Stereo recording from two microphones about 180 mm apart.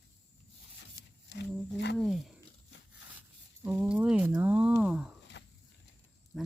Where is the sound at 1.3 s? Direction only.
70° left (ahead or behind).